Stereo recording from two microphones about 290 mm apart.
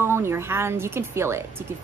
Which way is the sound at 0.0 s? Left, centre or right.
Centre.